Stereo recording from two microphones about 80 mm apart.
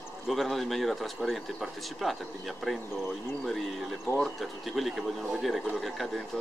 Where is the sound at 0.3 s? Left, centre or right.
Centre.